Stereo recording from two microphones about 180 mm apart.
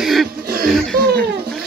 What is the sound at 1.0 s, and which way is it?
Speech, 60° right (ahead or behind).